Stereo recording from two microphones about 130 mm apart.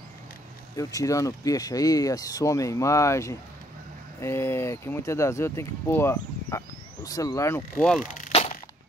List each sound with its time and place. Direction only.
0.7 s speech: 25° left (ahead or behind)
8.0 s speech: 80° left
8.3 s a sound: 50° left (ahead or behind)